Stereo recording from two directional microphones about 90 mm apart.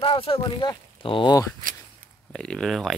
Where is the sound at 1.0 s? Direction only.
75° left (ahead or behind).